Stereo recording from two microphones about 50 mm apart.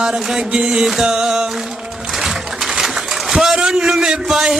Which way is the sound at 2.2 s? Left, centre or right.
Centre.